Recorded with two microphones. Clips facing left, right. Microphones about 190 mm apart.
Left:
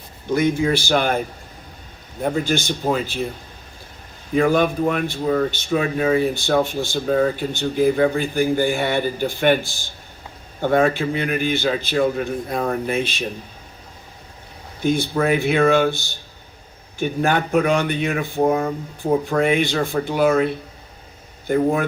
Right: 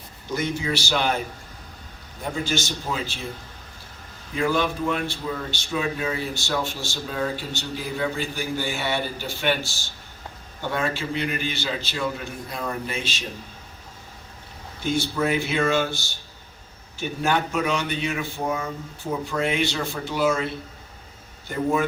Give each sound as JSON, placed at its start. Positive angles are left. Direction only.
{"t": 0.3, "sound": "a man's voice", "side_deg": 55}
{"t": 2.2, "sound": "speech", "side_deg": 55}
{"t": 4.4, "sound": "speech", "side_deg": 55}
{"t": 10.6, "sound": "a man's voice", "side_deg": 55}
{"t": 14.8, "sound": "speech", "side_deg": 55}
{"t": 17.0, "sound": "a man's voice", "side_deg": 55}